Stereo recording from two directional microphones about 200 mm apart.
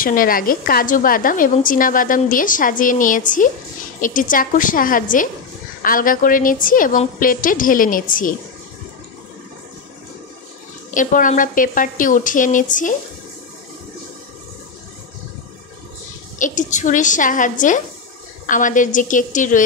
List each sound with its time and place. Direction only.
0.0 s a woman's voice: 45° left (ahead or behind)
11.0 s a woman's voice: 40° left (ahead or behind)
16.3 s a woman's voice: 40° left (ahead or behind)